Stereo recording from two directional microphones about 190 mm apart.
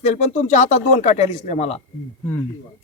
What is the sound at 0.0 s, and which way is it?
Speech, 35° left (ahead or behind).